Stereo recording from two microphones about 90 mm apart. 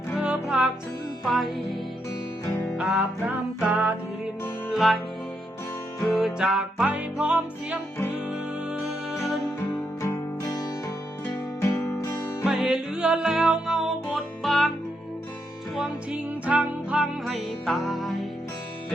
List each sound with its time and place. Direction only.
0.2 s music: 10° right (ahead or behind)
2.5 s music: 35° left (ahead or behind)
2.7 s music: 10° right (ahead or behind)
4.7 s music: centre (ahead or behind)
6.1 s music: centre (ahead or behind)
10.0 s music: 40° left (ahead or behind)
12.5 s music: 5° right (ahead or behind)
16.5 s music: 10° right (ahead or behind)
17.2 s music: centre (ahead or behind)